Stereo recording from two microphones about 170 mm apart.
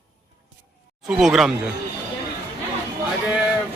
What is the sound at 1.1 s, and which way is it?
Speech, centre (ahead or behind).